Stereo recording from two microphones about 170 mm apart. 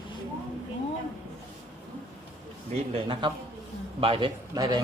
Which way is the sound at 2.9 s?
30° right (ahead or behind).